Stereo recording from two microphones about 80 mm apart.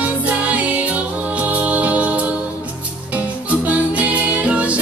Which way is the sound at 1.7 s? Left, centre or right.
Centre.